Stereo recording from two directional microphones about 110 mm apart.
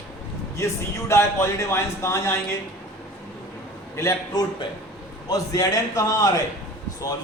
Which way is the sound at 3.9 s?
25° left (ahead or behind).